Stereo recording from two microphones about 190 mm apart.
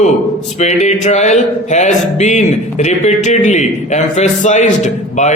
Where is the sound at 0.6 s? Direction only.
35° left (ahead or behind).